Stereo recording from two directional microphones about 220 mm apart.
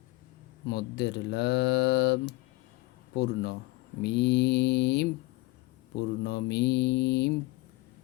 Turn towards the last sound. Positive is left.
turn(degrees=50)  # may be behind; listen again after turning